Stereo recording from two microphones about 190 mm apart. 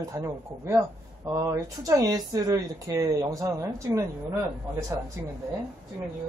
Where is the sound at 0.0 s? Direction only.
15° right (ahead or behind).